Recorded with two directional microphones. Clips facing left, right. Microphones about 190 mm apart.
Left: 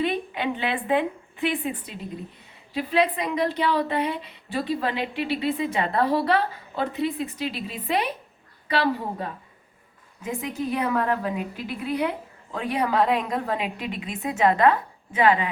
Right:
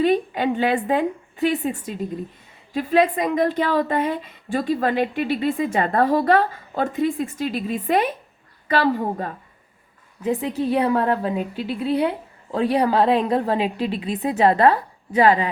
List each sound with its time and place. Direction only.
0.0 s a woman's voice: 40° right (ahead or behind)
10.2 s a woman's voice: 30° right (ahead or behind)